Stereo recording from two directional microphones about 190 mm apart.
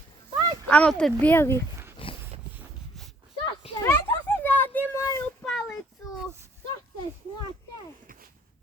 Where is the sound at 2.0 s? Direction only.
30° left (ahead or behind).